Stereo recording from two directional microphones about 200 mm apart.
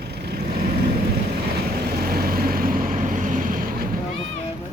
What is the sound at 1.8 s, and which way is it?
Vehicle, 50° right (ahead or behind).